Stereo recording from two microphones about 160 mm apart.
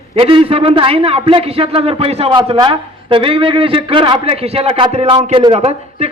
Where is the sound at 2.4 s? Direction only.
30° right (ahead or behind).